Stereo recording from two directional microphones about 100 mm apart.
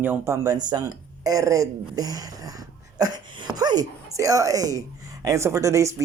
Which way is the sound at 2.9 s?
40° right (ahead or behind).